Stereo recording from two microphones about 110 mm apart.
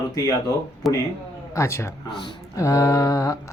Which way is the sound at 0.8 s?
Centre (ahead or behind).